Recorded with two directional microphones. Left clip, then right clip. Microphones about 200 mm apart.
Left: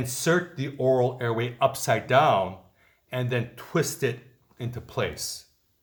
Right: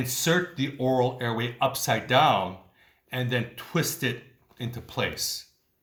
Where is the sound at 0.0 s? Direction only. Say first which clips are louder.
Even; 40° left (ahead or behind).